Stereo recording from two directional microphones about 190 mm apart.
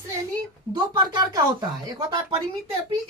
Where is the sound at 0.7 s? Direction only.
20° right (ahead or behind).